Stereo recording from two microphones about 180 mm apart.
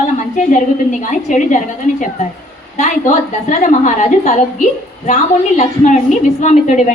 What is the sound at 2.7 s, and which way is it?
A woman's voice, 40° left (ahead or behind).